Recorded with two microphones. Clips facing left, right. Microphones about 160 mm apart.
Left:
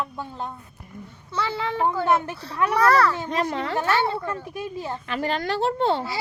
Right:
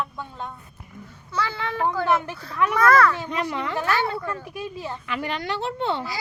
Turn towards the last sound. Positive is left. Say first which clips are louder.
# left 4 dB
turn(degrees=35)  # may be behind; listen again after turning